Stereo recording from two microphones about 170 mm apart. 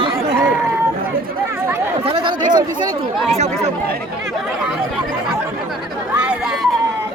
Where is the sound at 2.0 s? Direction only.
30° right (ahead or behind).